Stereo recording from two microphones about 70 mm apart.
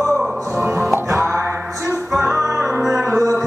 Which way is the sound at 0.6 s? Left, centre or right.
Right.